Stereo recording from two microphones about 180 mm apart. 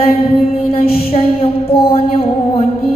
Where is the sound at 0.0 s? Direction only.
30° left (ahead or behind).